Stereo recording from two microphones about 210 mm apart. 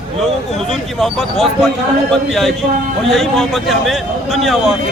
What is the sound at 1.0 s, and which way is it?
Speech, centre (ahead or behind).